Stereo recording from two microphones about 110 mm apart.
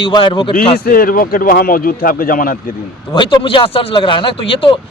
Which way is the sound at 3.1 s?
45° left (ahead or behind).